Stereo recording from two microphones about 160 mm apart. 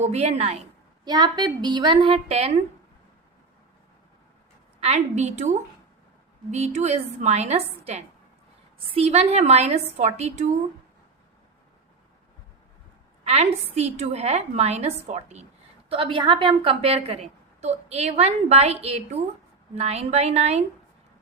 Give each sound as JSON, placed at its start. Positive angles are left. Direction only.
{"t": 0.0, "sound": "a woman's voice", "side_deg": -40}
{"t": 1.0, "sound": "a woman's voice", "side_deg": -25}
{"t": 4.8, "sound": "a woman's voice", "side_deg": -45}
{"t": 13.2, "sound": "a woman's voice", "side_deg": -45}
{"t": 15.9, "sound": "a woman's voice", "side_deg": -30}